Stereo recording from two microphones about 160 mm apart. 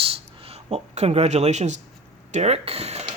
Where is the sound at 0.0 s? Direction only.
35° right (ahead or behind).